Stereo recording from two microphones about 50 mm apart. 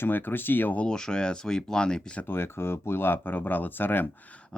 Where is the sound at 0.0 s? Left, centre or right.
Left.